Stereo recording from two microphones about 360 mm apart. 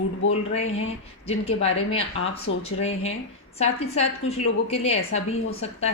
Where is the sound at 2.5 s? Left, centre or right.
Left.